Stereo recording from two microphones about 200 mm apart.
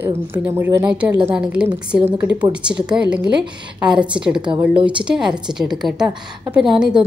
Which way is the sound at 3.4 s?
20° right (ahead or behind).